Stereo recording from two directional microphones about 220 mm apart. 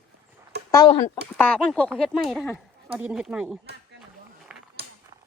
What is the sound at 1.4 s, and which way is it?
Speech, 5° left (ahead or behind).